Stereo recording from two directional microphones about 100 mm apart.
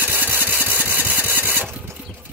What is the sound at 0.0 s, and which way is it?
Engine, 20° right (ahead or behind).